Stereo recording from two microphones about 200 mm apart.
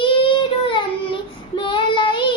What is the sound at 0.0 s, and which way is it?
Child singing, 25° left (ahead or behind).